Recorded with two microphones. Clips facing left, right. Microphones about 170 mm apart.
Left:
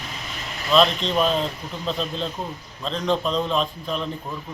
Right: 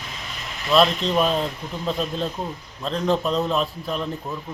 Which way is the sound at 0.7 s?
5° right (ahead or behind).